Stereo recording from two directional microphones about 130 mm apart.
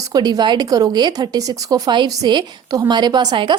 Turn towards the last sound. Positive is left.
turn(degrees=-35)  # may be behind; listen again after turning